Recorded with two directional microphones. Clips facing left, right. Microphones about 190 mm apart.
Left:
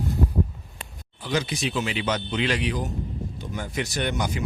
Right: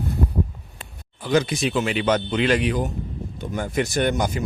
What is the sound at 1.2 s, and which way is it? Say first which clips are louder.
Speech: right 6 dB; 50° right (ahead or behind).